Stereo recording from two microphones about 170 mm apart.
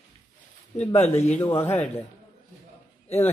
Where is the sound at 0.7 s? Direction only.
40° left (ahead or behind).